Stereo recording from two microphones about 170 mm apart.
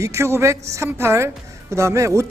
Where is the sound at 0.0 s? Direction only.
15° right (ahead or behind).